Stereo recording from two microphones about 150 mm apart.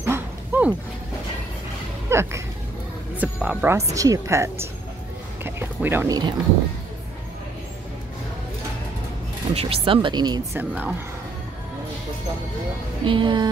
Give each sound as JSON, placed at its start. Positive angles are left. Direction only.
{"t": 0.0, "sound": "bow-wow", "side_deg": -15}
{"t": 2.0, "sound": "a sound", "side_deg": -15}
{"t": 3.2, "sound": "a woman's voice", "side_deg": -10}
{"t": 5.4, "sound": "a sound", "side_deg": -15}
{"t": 6.0, "sound": "a woman's voice", "side_deg": -25}
{"t": 9.6, "sound": "speech", "side_deg": -40}
{"t": 10.6, "sound": "speech", "side_deg": -10}
{"t": 13.0, "sound": "speech", "side_deg": -35}